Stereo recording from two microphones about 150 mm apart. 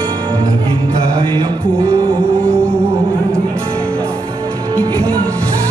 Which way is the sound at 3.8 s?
5° left (ahead or behind).